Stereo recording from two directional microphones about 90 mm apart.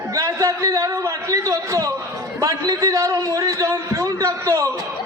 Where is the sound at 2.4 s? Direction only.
40° right (ahead or behind).